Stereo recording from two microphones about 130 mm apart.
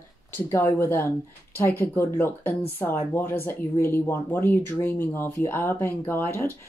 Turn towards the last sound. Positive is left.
turn(degrees=15)  # may be behind; listen again after turning